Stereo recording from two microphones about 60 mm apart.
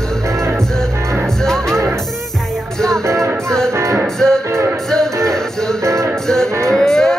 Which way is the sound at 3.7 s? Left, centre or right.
Right.